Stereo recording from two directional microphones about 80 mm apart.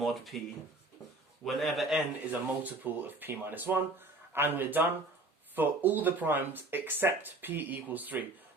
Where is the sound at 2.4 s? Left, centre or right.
Right.